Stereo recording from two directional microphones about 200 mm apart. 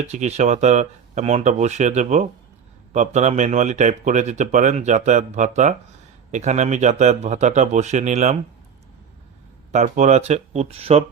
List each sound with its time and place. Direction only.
0.0 s speech: 35° right (ahead or behind)
9.7 s speech: 40° right (ahead or behind)